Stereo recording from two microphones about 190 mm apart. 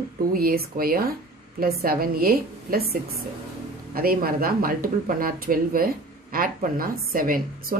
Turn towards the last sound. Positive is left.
turn(degrees=-50)  # may be behind; listen again after turning